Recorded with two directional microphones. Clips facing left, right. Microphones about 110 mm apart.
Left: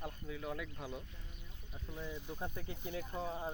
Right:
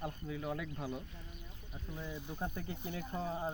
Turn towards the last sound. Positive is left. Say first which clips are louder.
# right 2 dB
turn(degrees=-5)  # may be behind; listen again after turning